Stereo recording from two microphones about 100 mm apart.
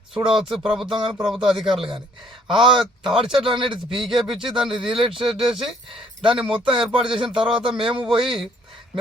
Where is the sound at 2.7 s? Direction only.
5° right (ahead or behind).